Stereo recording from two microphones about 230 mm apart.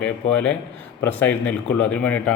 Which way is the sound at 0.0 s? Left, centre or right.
Centre.